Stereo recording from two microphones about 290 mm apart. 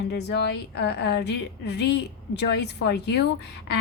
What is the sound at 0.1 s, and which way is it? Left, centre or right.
A woman's voice, left.